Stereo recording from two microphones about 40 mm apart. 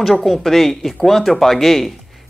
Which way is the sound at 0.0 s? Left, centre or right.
Centre.